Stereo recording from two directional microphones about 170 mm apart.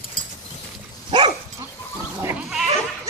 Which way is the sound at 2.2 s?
5° right (ahead or behind).